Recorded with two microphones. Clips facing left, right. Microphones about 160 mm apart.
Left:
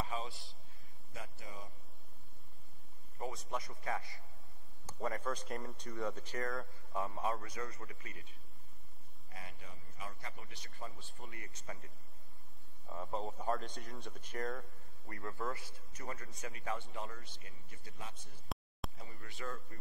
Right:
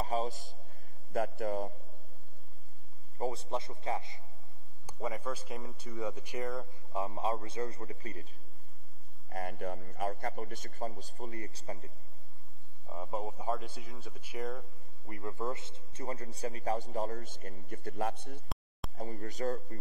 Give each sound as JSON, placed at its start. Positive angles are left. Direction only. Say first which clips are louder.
{"t": 0.0, "sound": "a sound", "louder": "right 8 dB", "side_deg": -40}
{"t": 1.1, "sound": "a man's voice", "louder": "right 17 dB", "side_deg": -65}
{"t": 3.2, "sound": "a man's voice", "louder": "right 6 dB", "side_deg": -30}
{"t": 5.0, "sound": "a man's voice", "louder": "right 2 dB", "side_deg": -5}
{"t": 9.3, "sound": "a man's voice", "louder": "right 15 dB", "side_deg": -55}
{"t": 12.8, "sound": "speech", "louder": "right 3 dB", "side_deg": -15}
{"t": 15.0, "sound": "a man's voice", "louder": "right 4 dB", "side_deg": -20}
{"t": 18.9, "sound": "a man's voice", "louder": "right 11 dB", "side_deg": -45}